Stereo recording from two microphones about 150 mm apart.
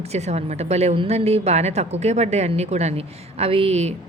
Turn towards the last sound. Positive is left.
turn(degrees=-45)  # may be behind; listen again after turning